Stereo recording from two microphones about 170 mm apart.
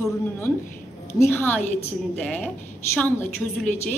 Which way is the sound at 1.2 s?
15° left (ahead or behind).